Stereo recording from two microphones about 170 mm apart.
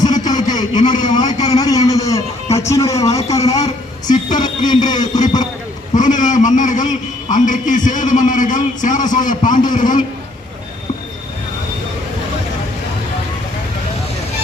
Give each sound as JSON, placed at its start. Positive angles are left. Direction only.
{"t": 0.0, "sound": "a man's voice", "side_deg": 25}
{"t": 4.0, "sound": "speech", "side_deg": 50}
{"t": 4.9, "sound": "a man's voice", "side_deg": 25}
{"t": 5.9, "sound": "a man's voice", "side_deg": 50}